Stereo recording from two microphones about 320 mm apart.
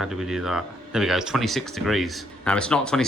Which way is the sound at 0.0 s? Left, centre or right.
Centre.